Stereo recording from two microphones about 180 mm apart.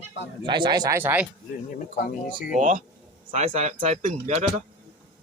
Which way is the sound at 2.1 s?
50° left (ahead or behind).